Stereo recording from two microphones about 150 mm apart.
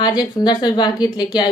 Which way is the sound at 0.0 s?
25° left (ahead or behind).